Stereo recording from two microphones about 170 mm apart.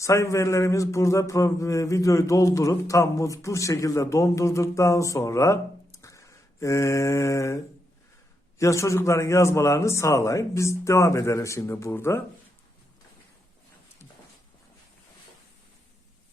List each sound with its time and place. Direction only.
0.0 s speech: 15° left (ahead or behind)